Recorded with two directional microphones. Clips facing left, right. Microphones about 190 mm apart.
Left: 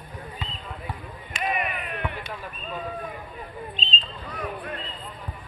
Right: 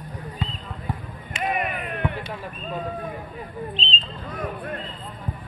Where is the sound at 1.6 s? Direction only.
50° right (ahead or behind).